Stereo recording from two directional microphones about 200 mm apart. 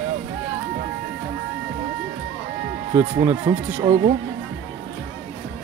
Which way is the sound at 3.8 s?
35° right (ahead or behind).